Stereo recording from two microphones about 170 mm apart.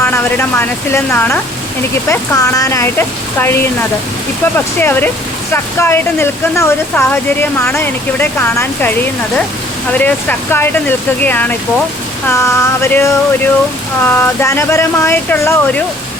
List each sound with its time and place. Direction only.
0.0 s speech: 15° left (ahead or behind)